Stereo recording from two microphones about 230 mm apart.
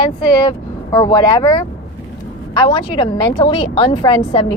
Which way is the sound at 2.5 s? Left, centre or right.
Left.